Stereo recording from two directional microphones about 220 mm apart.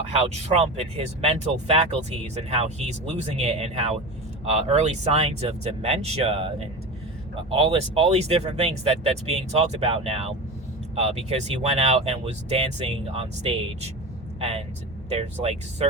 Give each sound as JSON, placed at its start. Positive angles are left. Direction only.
{"t": 0.1, "sound": "speech", "side_deg": -30}
{"t": 7.5, "sound": "speech", "side_deg": -25}